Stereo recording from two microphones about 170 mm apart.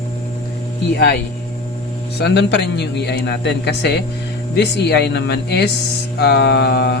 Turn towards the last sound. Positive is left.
turn(degrees=75)  # may be behind; listen again after turning